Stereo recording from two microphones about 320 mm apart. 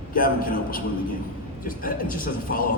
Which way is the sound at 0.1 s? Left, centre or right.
Left.